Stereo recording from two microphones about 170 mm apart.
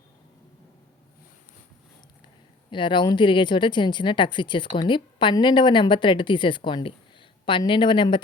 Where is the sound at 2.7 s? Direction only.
30° left (ahead or behind).